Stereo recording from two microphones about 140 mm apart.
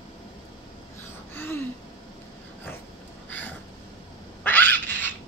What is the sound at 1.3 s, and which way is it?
Gasp, 15° left (ahead or behind).